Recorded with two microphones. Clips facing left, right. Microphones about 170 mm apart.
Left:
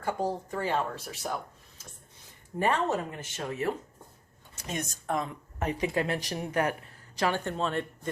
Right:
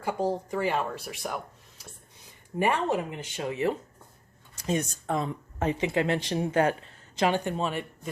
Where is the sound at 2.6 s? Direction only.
15° right (ahead or behind).